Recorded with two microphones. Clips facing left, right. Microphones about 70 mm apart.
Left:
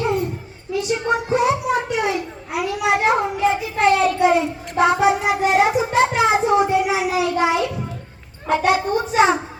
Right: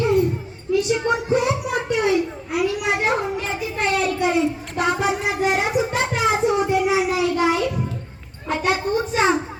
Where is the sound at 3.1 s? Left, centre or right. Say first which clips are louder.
Left 5 dB; centre.